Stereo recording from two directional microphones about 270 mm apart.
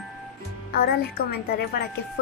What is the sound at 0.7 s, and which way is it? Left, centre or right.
Speech, left.